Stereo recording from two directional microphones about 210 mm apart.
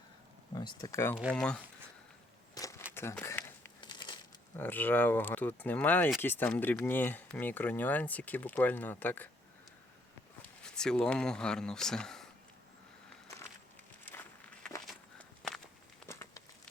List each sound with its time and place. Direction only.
0.5 s speech: 20° left (ahead or behind)
2.6 s a sound: 15° left (ahead or behind)
3.8 s crumpling: 20° left (ahead or behind)
4.5 s speech: 10° left (ahead or behind)
10.6 s speech: 5° left (ahead or behind)
14.0 s walk: 10° left (ahead or behind)
16.0 s a sound: 15° left (ahead or behind)